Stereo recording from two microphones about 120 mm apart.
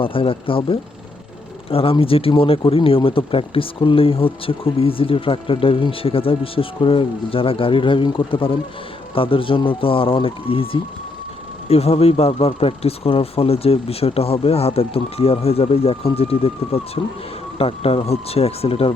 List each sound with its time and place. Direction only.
0.0 s speech: 50° left (ahead or behind)